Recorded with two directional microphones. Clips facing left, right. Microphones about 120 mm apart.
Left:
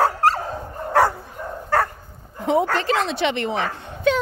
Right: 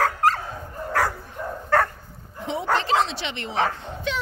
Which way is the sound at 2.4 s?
50° left (ahead or behind).